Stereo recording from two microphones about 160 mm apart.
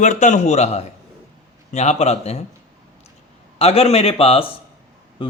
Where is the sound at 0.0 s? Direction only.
50° left (ahead or behind).